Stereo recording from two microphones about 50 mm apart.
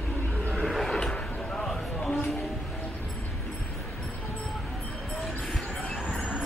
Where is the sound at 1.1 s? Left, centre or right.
Left.